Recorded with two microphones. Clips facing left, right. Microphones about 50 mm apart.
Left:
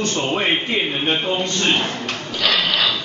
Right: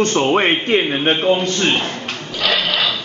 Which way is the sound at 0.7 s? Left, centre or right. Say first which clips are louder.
Right 5 dB; right.